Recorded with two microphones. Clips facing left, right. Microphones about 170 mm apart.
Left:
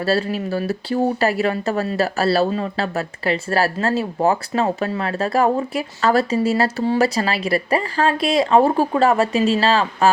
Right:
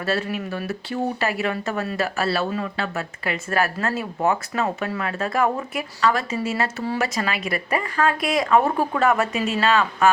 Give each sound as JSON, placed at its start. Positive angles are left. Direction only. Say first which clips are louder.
{"t": 0.0, "sound": "speech", "louder": "left 5 dB", "side_deg": 35}